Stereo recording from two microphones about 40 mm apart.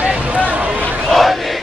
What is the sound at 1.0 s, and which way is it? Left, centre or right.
Chant, centre.